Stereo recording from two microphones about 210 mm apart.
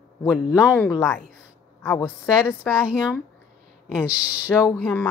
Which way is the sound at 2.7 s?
5° right (ahead or behind).